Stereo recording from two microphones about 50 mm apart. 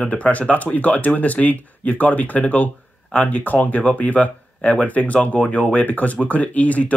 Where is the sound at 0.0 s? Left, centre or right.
Left.